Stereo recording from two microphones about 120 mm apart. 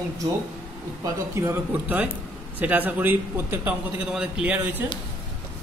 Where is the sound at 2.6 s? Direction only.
15° right (ahead or behind).